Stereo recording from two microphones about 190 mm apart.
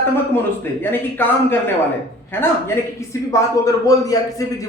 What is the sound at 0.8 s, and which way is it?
Speech, 10° left (ahead or behind).